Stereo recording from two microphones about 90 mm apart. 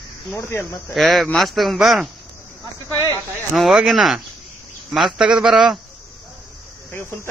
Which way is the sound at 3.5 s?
Centre (ahead or behind).